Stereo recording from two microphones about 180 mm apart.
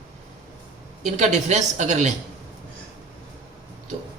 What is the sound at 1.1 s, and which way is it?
A woman's voice, 40° right (ahead or behind).